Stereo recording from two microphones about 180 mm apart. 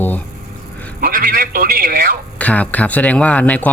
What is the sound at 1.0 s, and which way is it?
A man's voice, 55° right (ahead or behind).